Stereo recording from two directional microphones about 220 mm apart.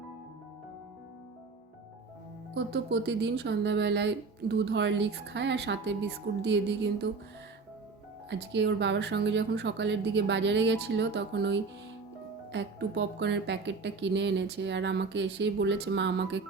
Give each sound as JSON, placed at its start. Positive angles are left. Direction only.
{"t": 2.7, "sound": "speech", "side_deg": -50}
{"t": 8.3, "sound": "speech", "side_deg": -50}